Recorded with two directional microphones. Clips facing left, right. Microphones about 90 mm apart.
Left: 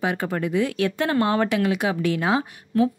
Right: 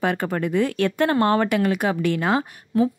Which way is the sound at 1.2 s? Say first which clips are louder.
Right 2 dB; 50° right (ahead or behind).